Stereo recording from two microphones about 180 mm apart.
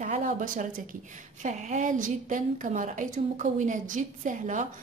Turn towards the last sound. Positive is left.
turn(degrees=-45)  # may be behind; listen again after turning